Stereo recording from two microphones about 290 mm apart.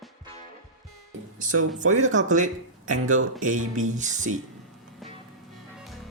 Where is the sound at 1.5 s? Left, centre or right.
Right.